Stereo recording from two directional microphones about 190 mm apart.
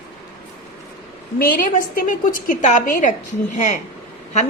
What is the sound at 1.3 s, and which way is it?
A woman's voice, 50° left (ahead or behind).